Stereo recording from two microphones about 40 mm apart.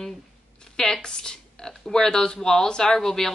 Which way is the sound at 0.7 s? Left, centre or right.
Centre.